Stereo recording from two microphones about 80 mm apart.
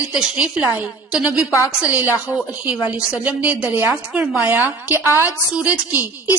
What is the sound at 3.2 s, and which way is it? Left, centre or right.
Music, right.